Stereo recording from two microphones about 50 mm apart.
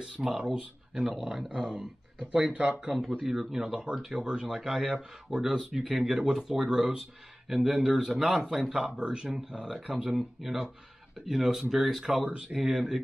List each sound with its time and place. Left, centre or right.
0.0 s a man's voice: centre
2.5 s speech: right
2.9 s speech: centre
4.5 s a man's voice: centre
8.7 s a man's voice: centre